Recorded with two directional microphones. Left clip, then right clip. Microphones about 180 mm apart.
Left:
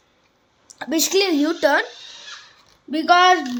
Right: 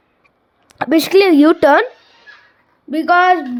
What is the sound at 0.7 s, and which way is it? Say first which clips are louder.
Speech: right 8 dB; 50° right (ahead or behind).